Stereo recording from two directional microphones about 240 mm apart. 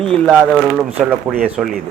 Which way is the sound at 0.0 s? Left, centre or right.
Centre.